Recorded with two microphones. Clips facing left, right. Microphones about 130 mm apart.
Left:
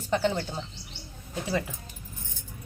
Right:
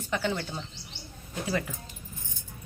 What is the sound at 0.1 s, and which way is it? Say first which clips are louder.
Speech: left 4 dB; 35° left (ahead or behind).